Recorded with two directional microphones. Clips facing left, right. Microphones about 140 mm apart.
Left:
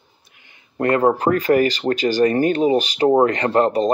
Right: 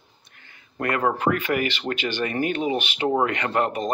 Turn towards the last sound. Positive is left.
turn(degrees=35)  # may be behind; listen again after turning